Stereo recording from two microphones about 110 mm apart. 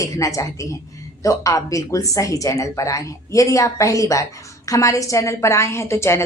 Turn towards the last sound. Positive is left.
turn(degrees=25)  # may be behind; listen again after turning